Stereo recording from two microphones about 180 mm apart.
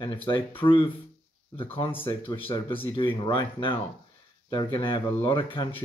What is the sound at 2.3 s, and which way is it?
Speech, 25° left (ahead or behind).